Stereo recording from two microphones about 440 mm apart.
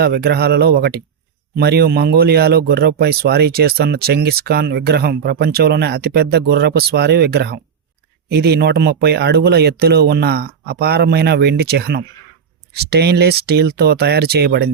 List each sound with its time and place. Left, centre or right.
0.0 s a man's voice: right